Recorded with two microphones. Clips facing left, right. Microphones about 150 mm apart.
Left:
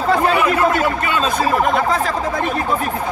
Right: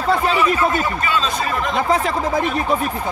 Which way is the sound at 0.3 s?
60° left (ahead or behind).